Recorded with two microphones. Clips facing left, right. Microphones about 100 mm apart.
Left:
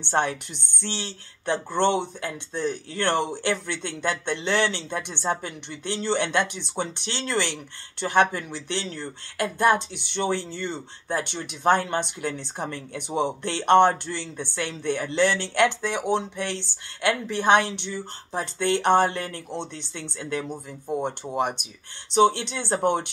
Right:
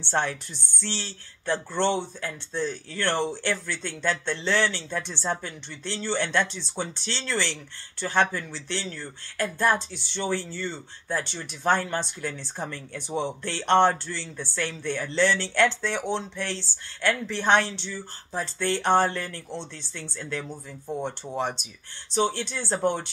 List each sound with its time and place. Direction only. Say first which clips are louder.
0.0 s speech: left 3 dB; 20° left (ahead or behind)